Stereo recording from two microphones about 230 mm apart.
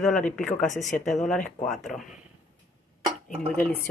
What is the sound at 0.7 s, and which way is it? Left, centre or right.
Speech, left.